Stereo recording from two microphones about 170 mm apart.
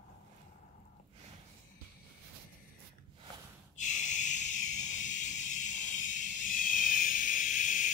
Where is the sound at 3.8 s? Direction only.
45° left (ahead or behind).